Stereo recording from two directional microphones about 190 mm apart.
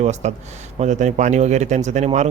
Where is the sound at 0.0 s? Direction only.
35° right (ahead or behind).